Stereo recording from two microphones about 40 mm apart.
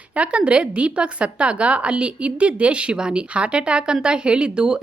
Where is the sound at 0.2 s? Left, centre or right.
Right.